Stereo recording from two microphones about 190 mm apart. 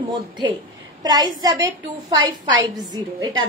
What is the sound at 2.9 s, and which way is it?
Speech, 20° right (ahead or behind).